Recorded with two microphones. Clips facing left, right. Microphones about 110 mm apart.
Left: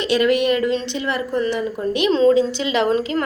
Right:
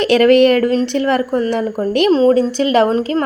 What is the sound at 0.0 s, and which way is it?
Speech, 60° right (ahead or behind).